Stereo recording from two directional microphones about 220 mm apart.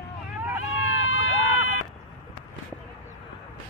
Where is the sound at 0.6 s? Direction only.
65° left (ahead or behind).